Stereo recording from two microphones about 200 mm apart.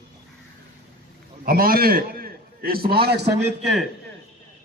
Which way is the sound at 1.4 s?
45° right (ahead or behind).